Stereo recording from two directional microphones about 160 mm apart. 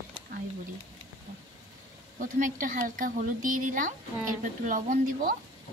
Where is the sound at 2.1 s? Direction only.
55° right (ahead or behind).